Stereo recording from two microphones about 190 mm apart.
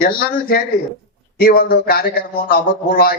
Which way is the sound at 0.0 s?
55° left (ahead or behind).